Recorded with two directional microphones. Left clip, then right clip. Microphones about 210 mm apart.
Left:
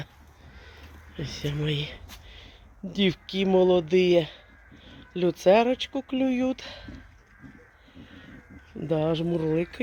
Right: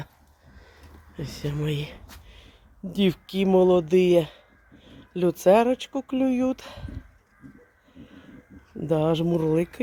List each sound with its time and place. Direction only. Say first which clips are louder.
0.6 s a sound: left 2 dB; centre (ahead or behind)
2.0 s speech: left 3 dB; 10° right (ahead or behind)
7.9 s cat: even; 10° right (ahead or behind)
8.8 s speech: right 3 dB; 15° right (ahead or behind)